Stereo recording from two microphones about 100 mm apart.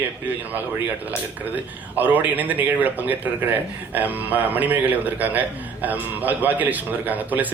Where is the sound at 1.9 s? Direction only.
15° right (ahead or behind).